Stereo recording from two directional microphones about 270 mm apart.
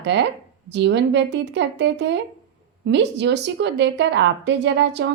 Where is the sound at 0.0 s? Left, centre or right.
Right.